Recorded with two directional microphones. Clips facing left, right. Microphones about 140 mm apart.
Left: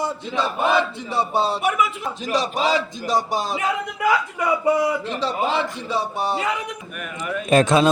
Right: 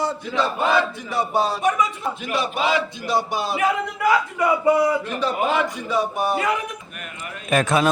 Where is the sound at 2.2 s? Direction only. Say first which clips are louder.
Left 2 dB; 35° left (ahead or behind).